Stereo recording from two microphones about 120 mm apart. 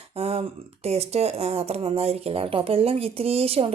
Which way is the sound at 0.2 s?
60° right (ahead or behind).